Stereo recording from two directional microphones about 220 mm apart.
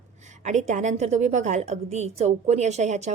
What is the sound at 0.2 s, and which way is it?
A woman's voice, 30° right (ahead or behind).